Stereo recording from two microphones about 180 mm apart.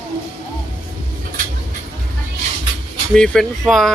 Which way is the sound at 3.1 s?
5° left (ahead or behind).